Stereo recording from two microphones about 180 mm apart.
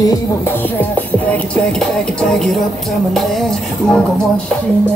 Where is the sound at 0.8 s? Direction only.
10° left (ahead or behind).